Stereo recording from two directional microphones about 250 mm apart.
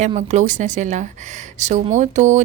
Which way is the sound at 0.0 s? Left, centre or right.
Right.